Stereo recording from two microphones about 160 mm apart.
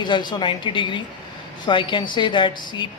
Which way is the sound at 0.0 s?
30° left (ahead or behind).